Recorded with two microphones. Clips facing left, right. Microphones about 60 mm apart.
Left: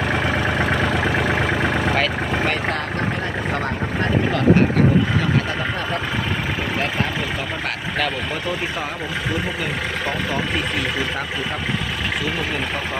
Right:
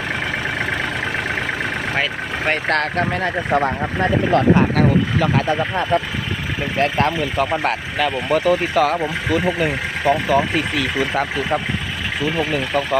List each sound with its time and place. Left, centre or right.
6.8 s speech: right
8.3 s speech: right